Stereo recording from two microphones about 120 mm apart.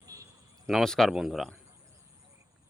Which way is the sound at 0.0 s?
30° right (ahead or behind).